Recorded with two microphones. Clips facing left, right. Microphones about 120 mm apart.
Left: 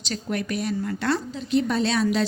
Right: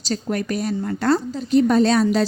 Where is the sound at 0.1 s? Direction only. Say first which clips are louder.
Right 4 dB; 40° right (ahead or behind).